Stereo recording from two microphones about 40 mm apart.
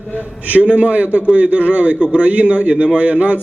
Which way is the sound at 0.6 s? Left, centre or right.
Right.